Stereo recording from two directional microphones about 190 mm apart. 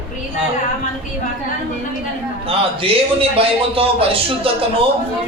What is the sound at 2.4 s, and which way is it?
A man's voice, 30° right (ahead or behind).